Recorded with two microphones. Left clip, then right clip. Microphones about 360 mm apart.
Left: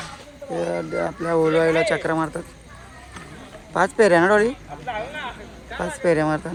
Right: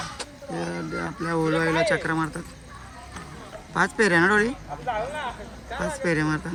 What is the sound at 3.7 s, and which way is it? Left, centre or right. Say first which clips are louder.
Speech: left 5 dB; centre.